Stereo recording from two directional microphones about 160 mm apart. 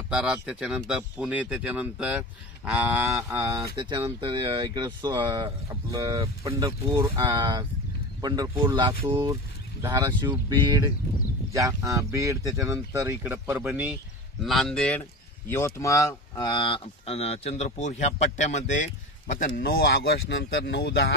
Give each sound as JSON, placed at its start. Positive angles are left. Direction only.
{"t": 0.1, "sound": "speech", "side_deg": -5}
{"t": 3.8, "sound": "speech", "side_deg": -30}
{"t": 10.0, "sound": "speech", "side_deg": -30}
{"t": 14.4, "sound": "speech", "side_deg": 0}
{"t": 19.3, "sound": "speech", "side_deg": 60}